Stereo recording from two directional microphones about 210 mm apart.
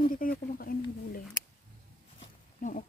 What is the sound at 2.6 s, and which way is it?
Speech, 35° left (ahead or behind).